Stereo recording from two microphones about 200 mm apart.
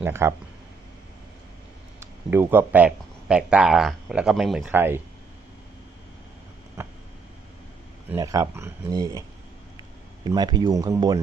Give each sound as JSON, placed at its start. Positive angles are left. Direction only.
{"t": 0.0, "sound": "speech", "side_deg": -15}
{"t": 2.0, "sound": "speech", "side_deg": -10}
{"t": 4.7, "sound": "speech", "side_deg": -10}
{"t": 8.1, "sound": "speech", "side_deg": -15}
{"t": 10.2, "sound": "speech", "side_deg": -20}